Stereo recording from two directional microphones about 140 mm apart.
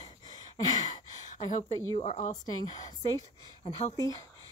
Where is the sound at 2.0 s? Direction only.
55° left (ahead or behind).